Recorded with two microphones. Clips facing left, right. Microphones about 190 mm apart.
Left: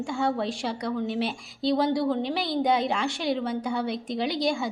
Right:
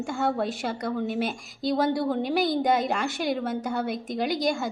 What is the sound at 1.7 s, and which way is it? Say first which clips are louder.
A woman's voice: left 1 dB; centre (ahead or behind).